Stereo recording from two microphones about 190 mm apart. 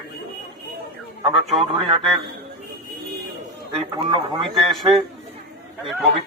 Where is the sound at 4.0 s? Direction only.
25° right (ahead or behind).